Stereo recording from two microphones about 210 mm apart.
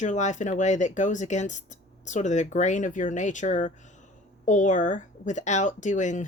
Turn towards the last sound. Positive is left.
turn(degrees=35)  # may be behind; listen again after turning